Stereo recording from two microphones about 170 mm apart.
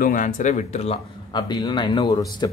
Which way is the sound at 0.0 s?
50° left (ahead or behind).